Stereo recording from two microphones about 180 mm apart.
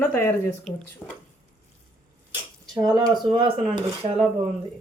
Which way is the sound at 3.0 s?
25° right (ahead or behind).